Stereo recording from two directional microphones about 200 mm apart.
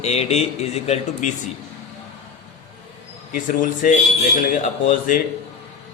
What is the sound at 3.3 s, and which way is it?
Speech, 45° left (ahead or behind).